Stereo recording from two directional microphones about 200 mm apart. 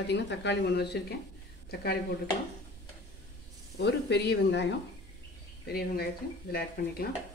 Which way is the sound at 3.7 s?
55° left (ahead or behind).